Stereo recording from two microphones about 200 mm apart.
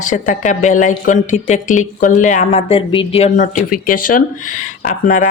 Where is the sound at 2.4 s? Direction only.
25° left (ahead or behind).